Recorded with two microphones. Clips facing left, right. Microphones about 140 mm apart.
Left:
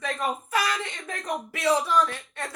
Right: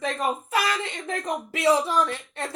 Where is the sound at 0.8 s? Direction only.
25° right (ahead or behind).